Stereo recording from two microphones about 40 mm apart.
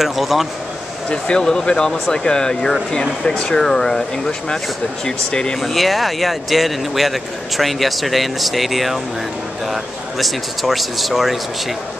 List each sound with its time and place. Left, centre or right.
0.0 s speech: centre
1.1 s speech: left
5.6 s speech: centre